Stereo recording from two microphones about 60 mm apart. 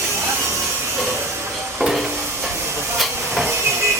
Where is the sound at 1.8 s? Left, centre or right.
Centre.